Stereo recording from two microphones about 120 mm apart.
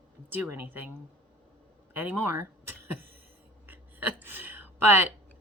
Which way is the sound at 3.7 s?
15° right (ahead or behind).